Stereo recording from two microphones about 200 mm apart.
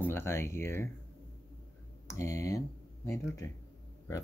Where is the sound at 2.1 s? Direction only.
15° left (ahead or behind).